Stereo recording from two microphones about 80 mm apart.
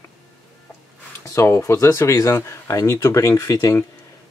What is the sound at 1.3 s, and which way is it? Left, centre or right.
Speech, left.